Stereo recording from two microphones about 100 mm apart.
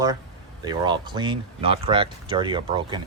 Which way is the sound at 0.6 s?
50° right (ahead or behind).